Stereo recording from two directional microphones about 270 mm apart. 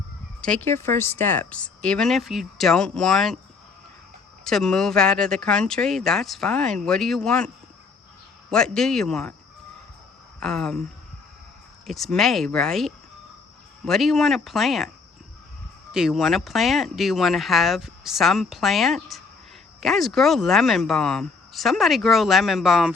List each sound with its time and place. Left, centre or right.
0.4 s speech: centre
4.4 s speech: centre
10.4 s speech: centre
11.9 s speech: centre
15.9 s speech: centre